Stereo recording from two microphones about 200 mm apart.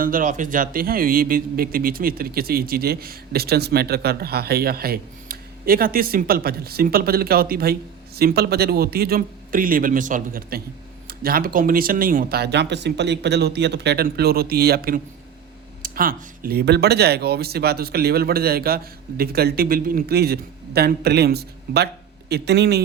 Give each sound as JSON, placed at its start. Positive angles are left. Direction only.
{"t": 0.0, "sound": "speech", "side_deg": -40}